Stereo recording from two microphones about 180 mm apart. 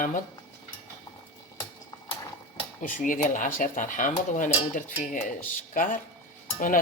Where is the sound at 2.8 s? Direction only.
50° left (ahead or behind).